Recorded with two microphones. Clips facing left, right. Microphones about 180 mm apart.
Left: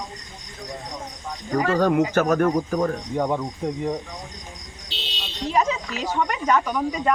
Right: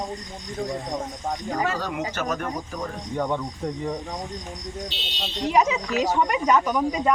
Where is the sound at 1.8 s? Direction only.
50° left (ahead or behind).